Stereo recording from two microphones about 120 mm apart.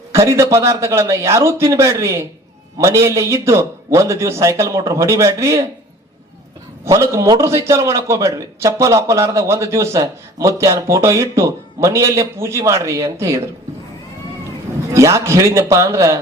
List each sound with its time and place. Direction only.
0.1 s a man's voice: 25° right (ahead or behind)
6.8 s a man's voice: 25° right (ahead or behind)
14.9 s a man's voice: 25° right (ahead or behind)